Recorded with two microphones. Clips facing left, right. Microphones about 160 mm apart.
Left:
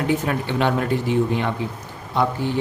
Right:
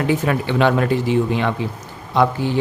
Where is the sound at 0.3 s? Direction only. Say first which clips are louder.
Right 4 dB; 90° right.